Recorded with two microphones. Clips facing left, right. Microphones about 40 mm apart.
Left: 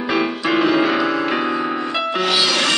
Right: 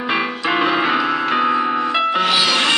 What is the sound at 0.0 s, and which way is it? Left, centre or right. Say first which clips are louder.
Music: even; centre.